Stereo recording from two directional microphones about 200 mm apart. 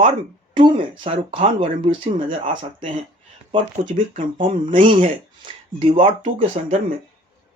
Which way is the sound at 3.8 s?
40° right (ahead or behind).